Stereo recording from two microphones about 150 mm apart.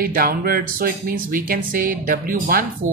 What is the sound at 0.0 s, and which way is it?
Speech, 80° right.